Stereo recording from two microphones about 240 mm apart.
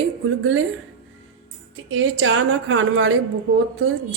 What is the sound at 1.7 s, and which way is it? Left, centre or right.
A woman's voice, right.